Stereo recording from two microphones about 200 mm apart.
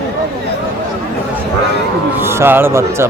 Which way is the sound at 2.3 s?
10° right (ahead or behind).